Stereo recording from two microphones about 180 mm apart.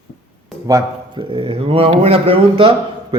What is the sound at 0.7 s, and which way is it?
Speech, 20° right (ahead or behind).